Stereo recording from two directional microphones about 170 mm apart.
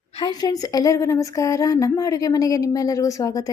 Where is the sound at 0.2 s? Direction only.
25° left (ahead or behind).